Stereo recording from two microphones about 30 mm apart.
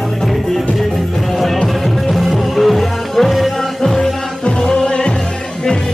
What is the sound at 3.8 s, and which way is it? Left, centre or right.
Music, centre.